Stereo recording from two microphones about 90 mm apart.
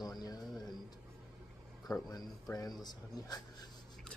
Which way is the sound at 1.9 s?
45° left (ahead or behind).